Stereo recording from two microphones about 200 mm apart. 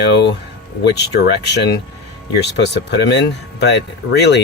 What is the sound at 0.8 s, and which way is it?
Speech, 60° left (ahead or behind).